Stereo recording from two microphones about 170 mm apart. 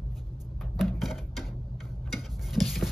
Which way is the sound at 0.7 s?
Centre (ahead or behind).